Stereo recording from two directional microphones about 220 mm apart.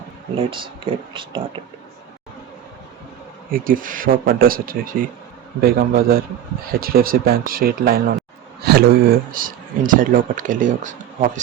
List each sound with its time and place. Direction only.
0.3 s speech: 25° right (ahead or behind)
3.5 s speech: 40° right (ahead or behind)